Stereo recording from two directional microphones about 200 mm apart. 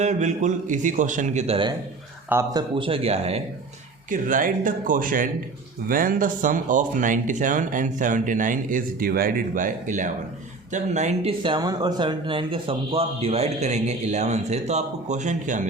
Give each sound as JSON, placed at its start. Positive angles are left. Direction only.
{"t": 0.0, "sound": "speech", "side_deg": -35}
{"t": 2.3, "sound": "speech", "side_deg": -15}
{"t": 4.1, "sound": "speech", "side_deg": -40}